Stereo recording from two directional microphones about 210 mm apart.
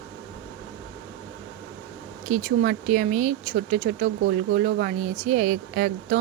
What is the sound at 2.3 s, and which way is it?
Speech, 40° right (ahead or behind).